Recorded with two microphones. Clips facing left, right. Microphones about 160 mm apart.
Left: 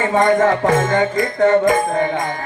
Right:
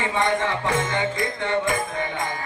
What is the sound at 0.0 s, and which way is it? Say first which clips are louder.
Music: left 9 dB; 45° left (ahead or behind).